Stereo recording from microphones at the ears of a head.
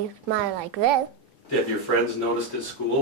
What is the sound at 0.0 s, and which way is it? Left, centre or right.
A woman's voice, right.